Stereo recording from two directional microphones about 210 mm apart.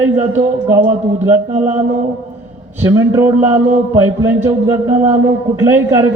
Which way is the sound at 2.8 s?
10° right (ahead or behind).